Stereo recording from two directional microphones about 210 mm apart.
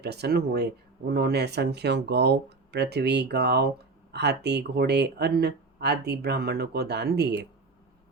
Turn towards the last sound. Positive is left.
turn(degrees=-50)  # may be behind; listen again after turning